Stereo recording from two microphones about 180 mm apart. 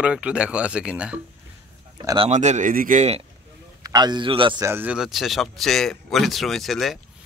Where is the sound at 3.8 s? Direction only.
25° right (ahead or behind).